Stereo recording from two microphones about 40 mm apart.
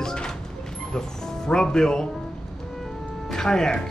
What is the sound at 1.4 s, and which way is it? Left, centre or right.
Speech, centre.